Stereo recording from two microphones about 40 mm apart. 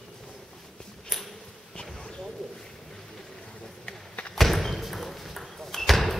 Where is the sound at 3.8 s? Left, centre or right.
Left.